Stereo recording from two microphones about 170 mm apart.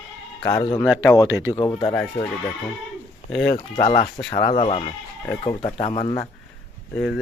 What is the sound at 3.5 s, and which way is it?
Speech, 25° left (ahead or behind).